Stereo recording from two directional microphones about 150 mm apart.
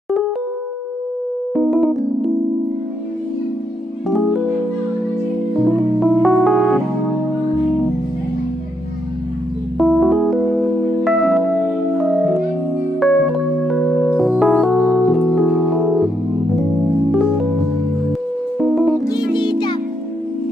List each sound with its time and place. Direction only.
1.5 s keyboard: centre (ahead or behind)
5.6 s music: centre (ahead or behind)
9.7 s music: centre (ahead or behind)
13.0 s music: centre (ahead or behind)
18.6 s music: centre (ahead or behind)
19.0 s music: 30° left (ahead or behind)